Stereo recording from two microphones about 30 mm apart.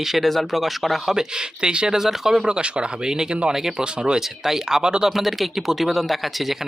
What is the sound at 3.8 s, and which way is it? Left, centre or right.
Speech, right.